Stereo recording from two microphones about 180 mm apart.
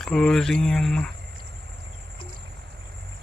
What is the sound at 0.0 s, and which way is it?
Speech, 5° left (ahead or behind).